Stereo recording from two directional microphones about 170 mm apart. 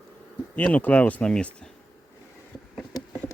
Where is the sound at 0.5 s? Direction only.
10° left (ahead or behind).